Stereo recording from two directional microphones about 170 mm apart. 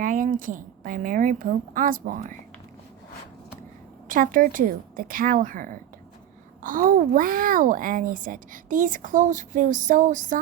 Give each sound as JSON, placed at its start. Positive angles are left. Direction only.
{"t": 0.0, "sound": "a child's voice", "side_deg": -50}
{"t": 4.1, "sound": "a child's voice", "side_deg": -55}